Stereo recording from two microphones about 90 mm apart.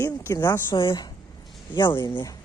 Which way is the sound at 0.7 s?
70° left (ahead or behind).